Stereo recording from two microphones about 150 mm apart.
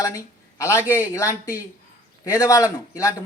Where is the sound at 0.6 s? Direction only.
15° left (ahead or behind).